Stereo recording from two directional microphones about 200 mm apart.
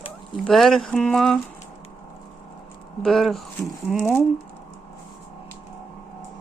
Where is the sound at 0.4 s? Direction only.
Centre (ahead or behind).